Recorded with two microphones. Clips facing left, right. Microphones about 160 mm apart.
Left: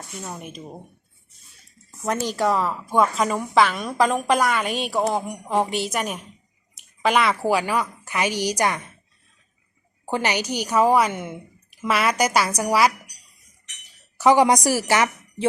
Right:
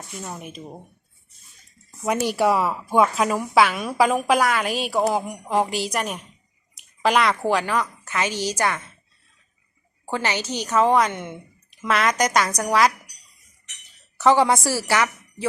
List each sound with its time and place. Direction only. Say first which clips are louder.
0.2 s a woman's voice: even; centre (ahead or behind)
2.0 s a woman's voice: right 2 dB; 10° right (ahead or behind); by 8.9 s 15° left (ahead or behind)
10.1 s a woman's voice: left 2 dB; 15° left (ahead or behind)
14.2 s a woman's voice: left 1 dB; 15° left (ahead or behind)